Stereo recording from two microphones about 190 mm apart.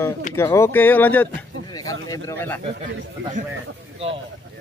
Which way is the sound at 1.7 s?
20° left (ahead or behind).